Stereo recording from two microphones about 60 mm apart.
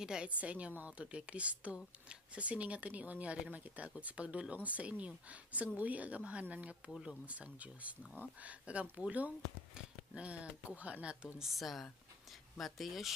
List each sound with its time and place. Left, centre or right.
0.0 s a woman's voice: centre
0.3 s a woman's voice: right
11.3 s a woman's voice: centre